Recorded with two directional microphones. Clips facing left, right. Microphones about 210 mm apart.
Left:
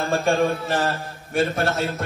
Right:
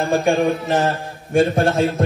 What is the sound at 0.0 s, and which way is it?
Music, 15° right (ahead or behind).